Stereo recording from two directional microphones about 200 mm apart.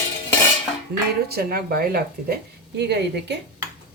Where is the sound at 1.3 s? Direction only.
50° right (ahead or behind).